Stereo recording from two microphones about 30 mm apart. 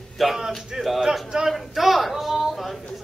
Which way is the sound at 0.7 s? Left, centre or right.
Centre.